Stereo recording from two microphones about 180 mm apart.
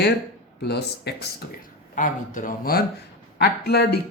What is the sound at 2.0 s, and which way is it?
Speech, 45° left (ahead or behind).